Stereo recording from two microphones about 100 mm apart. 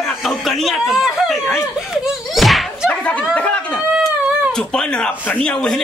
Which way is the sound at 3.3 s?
15° left (ahead or behind).